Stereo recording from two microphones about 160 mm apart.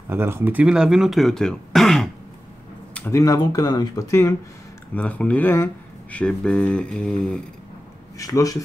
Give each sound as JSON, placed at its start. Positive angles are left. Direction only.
{"t": 0.1, "sound": "speech", "side_deg": -15}
{"t": 2.9, "sound": "a sound", "side_deg": 10}
{"t": 3.2, "sound": "speech", "side_deg": 20}
{"t": 8.2, "sound": "speech", "side_deg": 20}